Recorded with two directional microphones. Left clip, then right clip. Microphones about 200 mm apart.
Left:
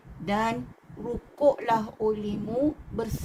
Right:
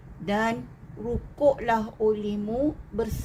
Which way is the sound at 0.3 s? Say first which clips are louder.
Right 1 dB; 15° left (ahead or behind).